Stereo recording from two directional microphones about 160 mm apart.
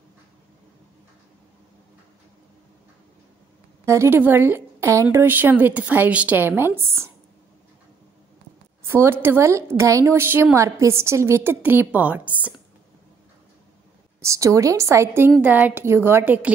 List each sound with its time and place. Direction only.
3.8 s a woman's voice: 20° right (ahead or behind)
8.8 s a woman's voice: 15° right (ahead or behind)
14.2 s a woman's voice: 20° right (ahead or behind)